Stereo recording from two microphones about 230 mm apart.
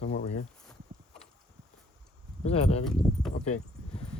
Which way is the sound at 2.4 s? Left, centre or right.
Left.